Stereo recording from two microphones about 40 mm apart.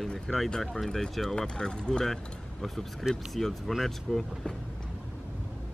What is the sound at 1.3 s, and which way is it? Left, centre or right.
Speech, centre.